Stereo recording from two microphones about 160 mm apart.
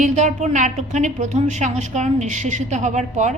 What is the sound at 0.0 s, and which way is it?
A woman's voice, 50° right (ahead or behind).